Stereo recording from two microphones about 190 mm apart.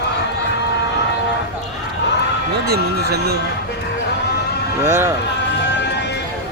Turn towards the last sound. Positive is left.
turn(degrees=-15)  # may be behind; listen again after turning